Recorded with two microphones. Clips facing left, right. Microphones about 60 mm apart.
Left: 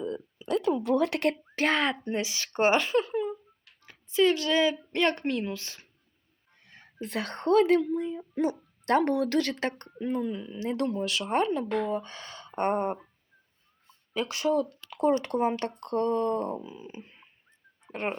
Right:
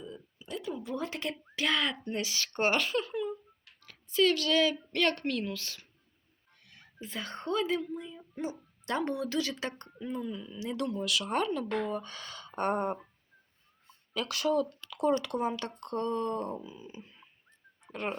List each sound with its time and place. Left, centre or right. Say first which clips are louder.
0.0 s a sound: left 11 dB; left
1.5 s a woman's voice: even; left
7.0 s speech: left 7 dB; left
8.9 s speech: left 8 dB; left
10.5 s speech: left 4 dB; left
11.7 s speech: left 4 dB; centre
11.9 s speech: left 3 dB; left
14.1 s speech: left 3 dB; left
14.8 s a sound: left 6 dB; left
15.2 s speech: left 5 dB; left